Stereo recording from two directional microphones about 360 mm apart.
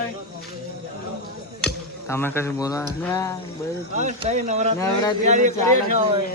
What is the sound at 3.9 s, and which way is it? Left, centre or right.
Speech, centre.